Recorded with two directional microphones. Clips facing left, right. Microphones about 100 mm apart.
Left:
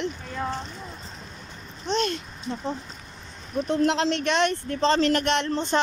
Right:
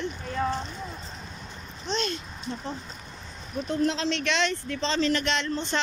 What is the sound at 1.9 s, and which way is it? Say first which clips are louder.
Speech: left 4 dB; 55° left (ahead or behind).